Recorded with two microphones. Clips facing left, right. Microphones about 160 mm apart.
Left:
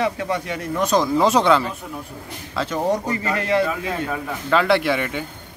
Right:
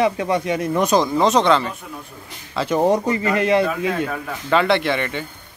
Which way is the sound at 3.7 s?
Centre (ahead or behind).